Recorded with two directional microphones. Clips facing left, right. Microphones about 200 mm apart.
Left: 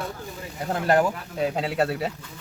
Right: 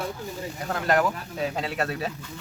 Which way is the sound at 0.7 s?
30° left (ahead or behind).